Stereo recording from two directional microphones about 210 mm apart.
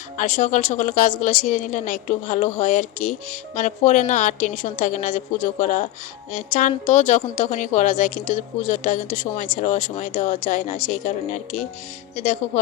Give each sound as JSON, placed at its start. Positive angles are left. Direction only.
{"t": 0.2, "sound": "a woman's voice", "side_deg": 35}